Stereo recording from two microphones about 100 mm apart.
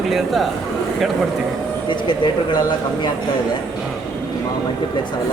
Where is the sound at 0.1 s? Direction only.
Centre (ahead or behind).